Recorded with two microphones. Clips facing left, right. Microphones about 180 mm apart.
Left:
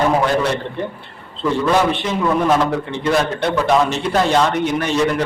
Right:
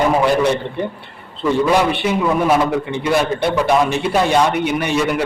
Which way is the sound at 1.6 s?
10° right (ahead or behind).